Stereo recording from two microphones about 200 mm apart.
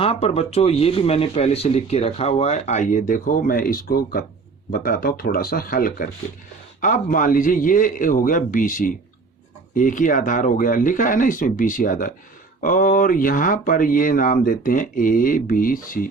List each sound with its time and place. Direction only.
0.0 s speech: 30° left (ahead or behind)